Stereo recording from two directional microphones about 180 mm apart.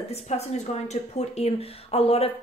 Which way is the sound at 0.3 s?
35° left (ahead or behind).